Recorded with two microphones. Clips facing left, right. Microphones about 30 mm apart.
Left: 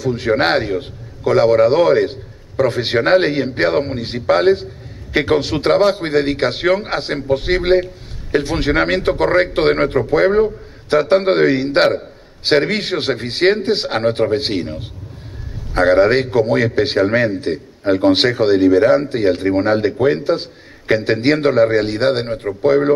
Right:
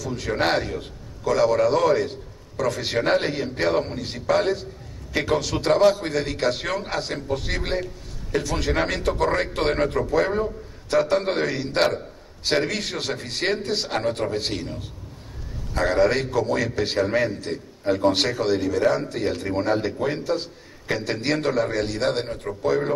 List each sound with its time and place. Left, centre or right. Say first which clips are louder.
0.0 s a man's voice: left 8 dB; left